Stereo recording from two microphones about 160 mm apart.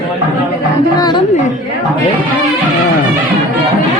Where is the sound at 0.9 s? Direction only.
25° left (ahead or behind).